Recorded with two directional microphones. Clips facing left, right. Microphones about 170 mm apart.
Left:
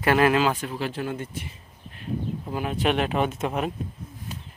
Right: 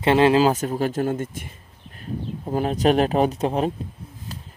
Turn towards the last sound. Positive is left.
turn(degrees=-35)  # may be behind; listen again after turning